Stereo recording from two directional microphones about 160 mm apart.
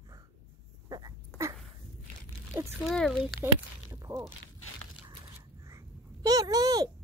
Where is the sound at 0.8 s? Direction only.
25° right (ahead or behind).